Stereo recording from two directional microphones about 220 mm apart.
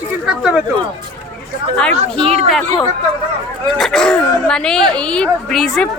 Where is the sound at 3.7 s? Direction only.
Centre (ahead or behind).